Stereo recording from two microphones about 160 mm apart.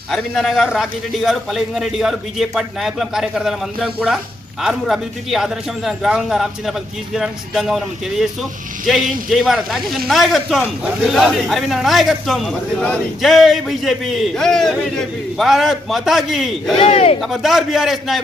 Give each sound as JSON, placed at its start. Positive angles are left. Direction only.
{"t": 0.1, "sound": "a man's voice", "side_deg": 0}
{"t": 16.8, "sound": "speech", "side_deg": 40}
{"t": 17.2, "sound": "a man's voice", "side_deg": 0}